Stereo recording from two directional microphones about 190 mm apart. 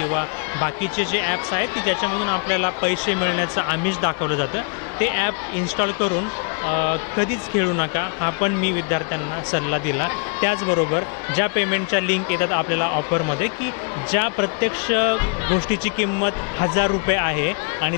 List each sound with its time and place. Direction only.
0.0 s speech: 15° left (ahead or behind)